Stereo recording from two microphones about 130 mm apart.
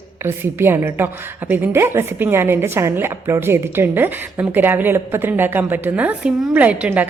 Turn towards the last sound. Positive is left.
turn(degrees=-10)  # may be behind; listen again after turning